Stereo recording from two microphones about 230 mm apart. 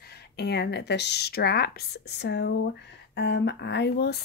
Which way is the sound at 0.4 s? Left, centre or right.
Left.